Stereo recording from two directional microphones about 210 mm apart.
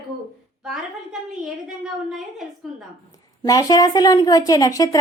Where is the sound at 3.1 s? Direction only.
15° left (ahead or behind).